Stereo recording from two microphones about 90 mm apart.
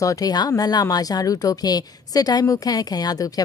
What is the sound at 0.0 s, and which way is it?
A woman's voice, 40° left (ahead or behind).